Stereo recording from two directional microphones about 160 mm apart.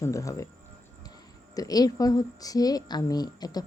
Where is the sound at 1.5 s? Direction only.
20° left (ahead or behind).